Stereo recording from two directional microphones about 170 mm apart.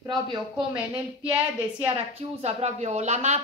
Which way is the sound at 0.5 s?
5° right (ahead or behind).